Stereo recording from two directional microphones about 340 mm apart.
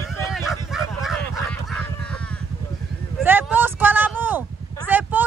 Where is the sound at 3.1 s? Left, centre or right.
Centre.